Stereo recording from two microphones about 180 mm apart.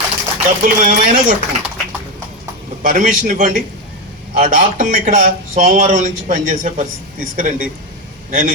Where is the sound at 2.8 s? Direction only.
45° right (ahead or behind).